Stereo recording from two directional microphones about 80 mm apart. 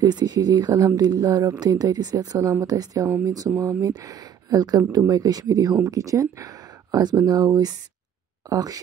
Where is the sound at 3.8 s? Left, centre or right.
Right.